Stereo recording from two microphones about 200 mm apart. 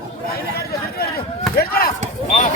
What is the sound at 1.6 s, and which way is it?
Basketball bounce, 50° left (ahead or behind).